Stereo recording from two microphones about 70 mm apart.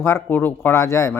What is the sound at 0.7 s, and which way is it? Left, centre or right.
Speech, left.